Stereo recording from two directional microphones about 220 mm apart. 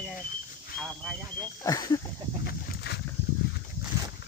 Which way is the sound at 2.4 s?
45° left (ahead or behind).